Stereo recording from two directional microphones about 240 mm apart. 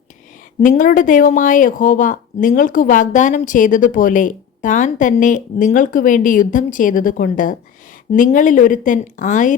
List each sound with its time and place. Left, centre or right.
0.6 s a woman's voice: left